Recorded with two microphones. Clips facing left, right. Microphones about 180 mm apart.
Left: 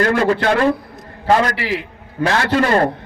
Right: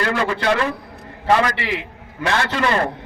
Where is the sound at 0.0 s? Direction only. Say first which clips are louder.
Left 5 dB; 45° left (ahead or behind).